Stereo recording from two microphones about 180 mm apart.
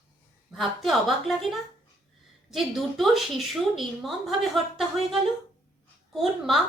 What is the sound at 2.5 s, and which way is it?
A woman's voice, centre (ahead or behind).